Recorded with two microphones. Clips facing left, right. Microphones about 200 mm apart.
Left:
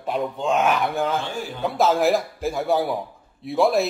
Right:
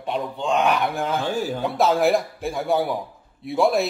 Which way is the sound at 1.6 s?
Centre (ahead or behind).